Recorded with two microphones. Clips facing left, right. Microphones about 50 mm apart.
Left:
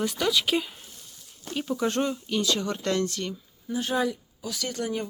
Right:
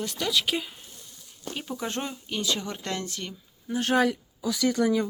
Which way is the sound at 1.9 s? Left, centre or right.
Centre.